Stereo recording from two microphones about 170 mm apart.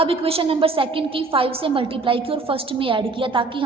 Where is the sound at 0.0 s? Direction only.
35° right (ahead or behind).